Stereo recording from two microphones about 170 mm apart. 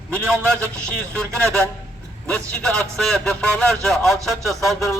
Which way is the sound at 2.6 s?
5° left (ahead or behind).